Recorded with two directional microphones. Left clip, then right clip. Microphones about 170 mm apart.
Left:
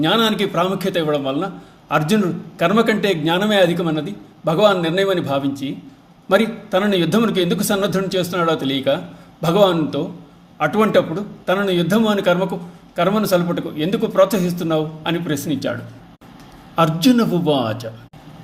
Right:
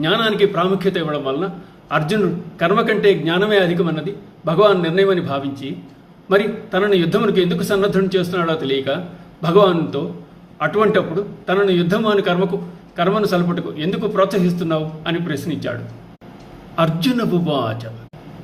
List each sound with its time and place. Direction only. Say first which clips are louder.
0.0 s a man's voice: right 1 dB; 50° left (ahead or behind)
16.7 s a man's voice: left 3 dB; 50° left (ahead or behind)